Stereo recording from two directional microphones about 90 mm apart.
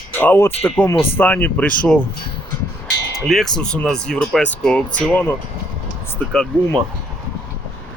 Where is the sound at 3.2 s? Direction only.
5° left (ahead or behind); by 5.4 s 20° left (ahead or behind).